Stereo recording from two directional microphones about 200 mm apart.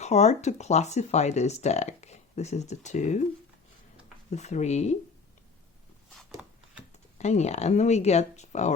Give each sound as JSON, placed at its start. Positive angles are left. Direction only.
{"t": 0.0, "sound": "speech", "side_deg": 35}
{"t": 4.3, "sound": "speech", "side_deg": 35}
{"t": 6.4, "sound": "a sound", "side_deg": -5}
{"t": 7.2, "sound": "speech", "side_deg": 35}